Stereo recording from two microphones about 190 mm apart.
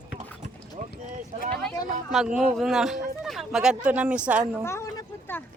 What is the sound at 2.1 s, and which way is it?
Speech, 5° right (ahead or behind).